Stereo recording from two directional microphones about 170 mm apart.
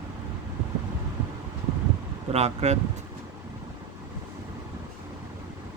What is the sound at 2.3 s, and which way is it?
Speech, 40° right (ahead or behind).